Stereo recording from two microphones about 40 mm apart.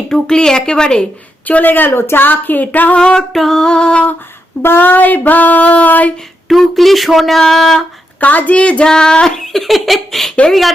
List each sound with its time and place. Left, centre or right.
0.1 s a woman's voice: centre
1.5 s female singing: left
2.9 s a woman's voice: left
3.2 s speech: centre
3.6 s a woman's voice: centre
4.6 s female singing: left
6.5 s speech: centre
8.2 s a woman's voice: left
8.5 s a woman's voice: left
8.9 s speech: centre